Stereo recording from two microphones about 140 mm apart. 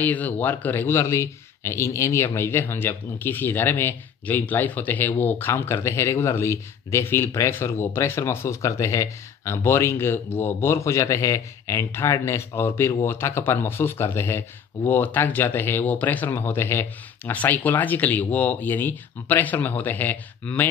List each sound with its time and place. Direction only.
0.0 s speech: 10° left (ahead or behind)